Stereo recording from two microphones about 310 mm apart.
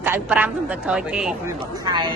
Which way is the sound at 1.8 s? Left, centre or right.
Centre.